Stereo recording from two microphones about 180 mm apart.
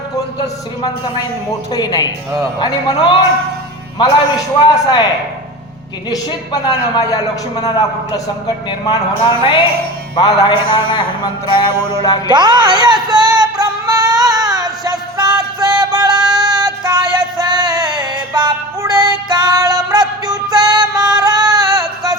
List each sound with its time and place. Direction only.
0.3 s speech: 25° left (ahead or behind)
6.1 s speech: 20° left (ahead or behind)
12.3 s music: 25° right (ahead or behind)